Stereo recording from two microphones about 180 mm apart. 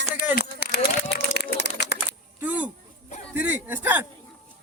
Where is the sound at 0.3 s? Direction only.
60° left (ahead or behind).